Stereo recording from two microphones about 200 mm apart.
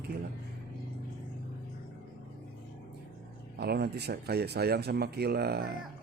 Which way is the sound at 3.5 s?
55° right (ahead or behind).